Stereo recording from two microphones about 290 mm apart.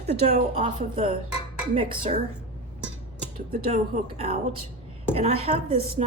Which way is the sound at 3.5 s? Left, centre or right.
Right.